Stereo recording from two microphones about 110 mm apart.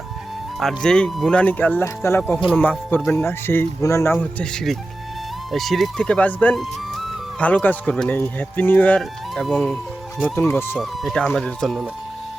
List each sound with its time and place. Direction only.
0.6 s speech: 5° left (ahead or behind)
5.5 s speech: centre (ahead or behind)
6.6 s music: centre (ahead or behind)
7.3 s speech: 15° left (ahead or behind)
9.0 s speech: centre (ahead or behind)
10.2 s speech: 20° left (ahead or behind)
10.8 s speech: 5° left (ahead or behind)